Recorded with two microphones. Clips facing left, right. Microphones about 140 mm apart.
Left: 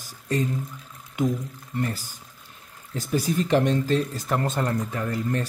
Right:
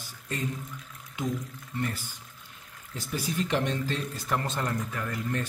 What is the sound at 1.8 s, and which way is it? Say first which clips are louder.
Speech: left 4 dB; 35° left (ahead or behind).